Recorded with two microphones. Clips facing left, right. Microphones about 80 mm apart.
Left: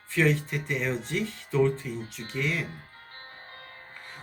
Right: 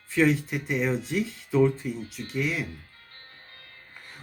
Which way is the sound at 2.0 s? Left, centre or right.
Left.